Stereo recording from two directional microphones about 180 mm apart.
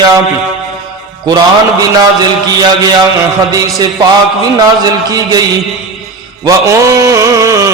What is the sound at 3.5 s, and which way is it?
Mantra, 20° right (ahead or behind).